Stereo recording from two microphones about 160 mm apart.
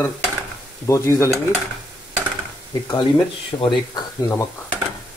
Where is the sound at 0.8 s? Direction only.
20° left (ahead or behind).